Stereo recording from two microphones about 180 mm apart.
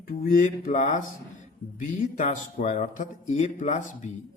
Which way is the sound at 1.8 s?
45° left (ahead or behind).